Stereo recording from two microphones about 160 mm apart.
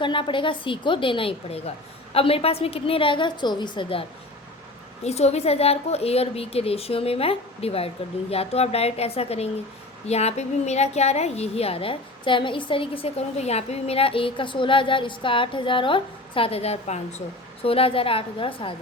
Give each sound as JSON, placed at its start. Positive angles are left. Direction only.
{"t": 0.0, "sound": "a woman's voice", "side_deg": 30}
{"t": 5.0, "sound": "a woman's voice", "side_deg": 40}